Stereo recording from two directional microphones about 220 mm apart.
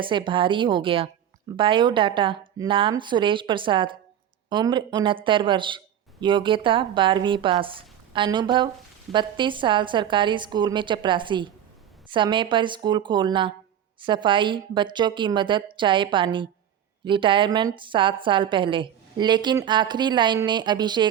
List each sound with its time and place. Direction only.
0.0 s speech: 20° right (ahead or behind)